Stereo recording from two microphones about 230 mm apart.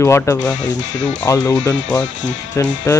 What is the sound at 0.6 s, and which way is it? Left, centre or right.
Speech, left.